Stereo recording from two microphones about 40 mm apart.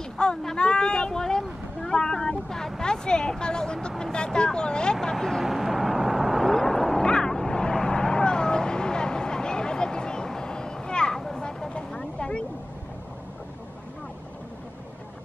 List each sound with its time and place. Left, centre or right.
0.2 s a sound: left
0.6 s vehicle: left
2.8 s speech: centre
4.0 s vehicle: centre
5.1 s vehicle: centre
5.4 s vehicle: centre
7.1 s a sound: left
7.3 s vehicle: centre